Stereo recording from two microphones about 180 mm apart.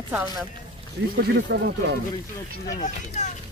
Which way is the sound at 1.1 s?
65° right (ahead or behind).